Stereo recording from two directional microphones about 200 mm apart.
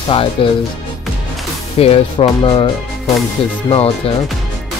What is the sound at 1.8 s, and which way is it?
Speech, 30° left (ahead or behind).